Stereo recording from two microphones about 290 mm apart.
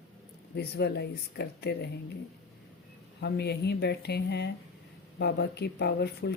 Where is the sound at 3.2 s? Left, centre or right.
Left.